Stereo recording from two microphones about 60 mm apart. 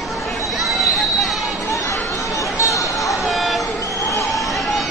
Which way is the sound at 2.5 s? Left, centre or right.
Left.